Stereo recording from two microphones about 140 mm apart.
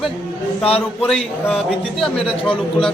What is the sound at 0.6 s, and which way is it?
Speech, 45° left (ahead or behind).